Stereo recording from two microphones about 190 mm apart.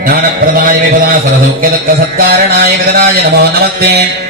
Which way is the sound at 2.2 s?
55° right (ahead or behind).